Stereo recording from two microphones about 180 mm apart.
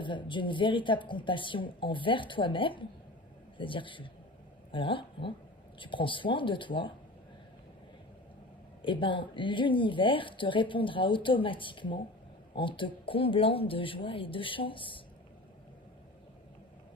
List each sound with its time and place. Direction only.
0.0 s speech: 25° left (ahead or behind)
8.8 s speech: 25° left (ahead or behind)